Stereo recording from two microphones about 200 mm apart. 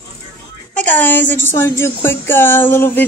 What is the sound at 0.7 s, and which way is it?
Speech, 10° left (ahead or behind).